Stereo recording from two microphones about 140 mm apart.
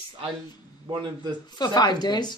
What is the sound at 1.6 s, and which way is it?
Speech, 30° left (ahead or behind).